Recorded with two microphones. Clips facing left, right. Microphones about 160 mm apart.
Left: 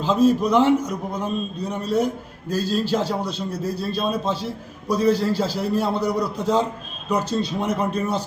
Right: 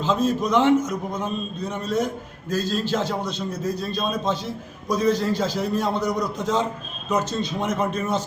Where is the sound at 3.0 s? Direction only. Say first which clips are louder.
Left 2 dB; 10° left (ahead or behind).